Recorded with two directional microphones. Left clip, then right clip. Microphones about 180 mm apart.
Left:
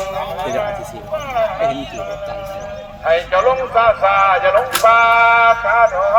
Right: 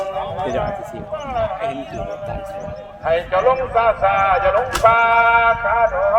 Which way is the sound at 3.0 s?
40° right (ahead or behind).